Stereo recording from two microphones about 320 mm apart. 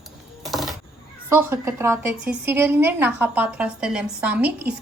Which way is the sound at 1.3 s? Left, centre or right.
Centre.